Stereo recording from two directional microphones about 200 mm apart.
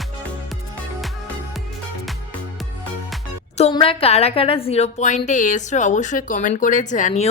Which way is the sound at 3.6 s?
25° left (ahead or behind).